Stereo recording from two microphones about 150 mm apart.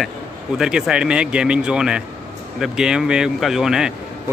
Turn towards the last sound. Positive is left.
turn(degrees=-5)  # may be behind; listen again after turning